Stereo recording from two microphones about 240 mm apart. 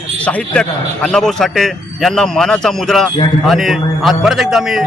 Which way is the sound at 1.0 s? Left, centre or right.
Centre.